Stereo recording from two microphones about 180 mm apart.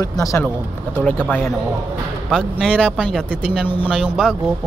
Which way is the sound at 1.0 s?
5° left (ahead or behind).